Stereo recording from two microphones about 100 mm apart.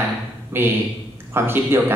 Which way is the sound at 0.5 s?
20° right (ahead or behind).